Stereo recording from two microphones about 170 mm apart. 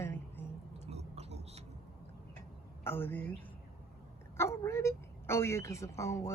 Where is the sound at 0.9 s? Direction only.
40° right (ahead or behind).